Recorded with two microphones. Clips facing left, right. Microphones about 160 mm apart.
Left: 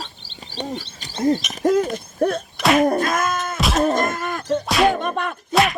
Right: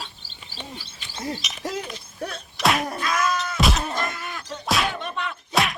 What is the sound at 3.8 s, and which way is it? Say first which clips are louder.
Groan: left 10 dB; 45° left (ahead or behind).